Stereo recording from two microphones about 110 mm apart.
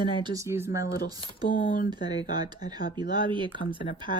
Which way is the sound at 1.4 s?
40° right (ahead or behind).